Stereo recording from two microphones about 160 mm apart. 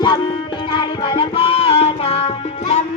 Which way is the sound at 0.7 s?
30° left (ahead or behind).